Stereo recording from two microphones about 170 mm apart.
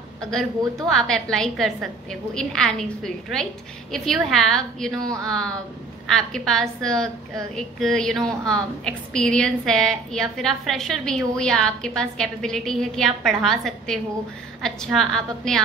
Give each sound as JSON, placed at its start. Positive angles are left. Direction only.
{"t": 0.3, "sound": "a woman's voice", "side_deg": 5}